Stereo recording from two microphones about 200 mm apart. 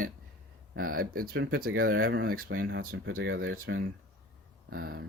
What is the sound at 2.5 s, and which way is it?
Speech, 65° right (ahead or behind).